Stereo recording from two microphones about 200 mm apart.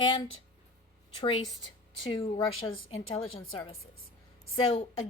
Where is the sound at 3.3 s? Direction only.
25° left (ahead or behind).